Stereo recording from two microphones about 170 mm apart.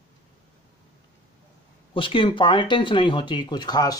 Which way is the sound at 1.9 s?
30° left (ahead or behind).